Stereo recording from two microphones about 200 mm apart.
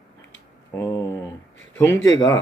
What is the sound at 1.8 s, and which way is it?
Speech, 15° left (ahead or behind).